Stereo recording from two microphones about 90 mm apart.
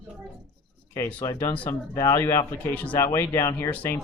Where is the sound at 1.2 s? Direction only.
40° left (ahead or behind).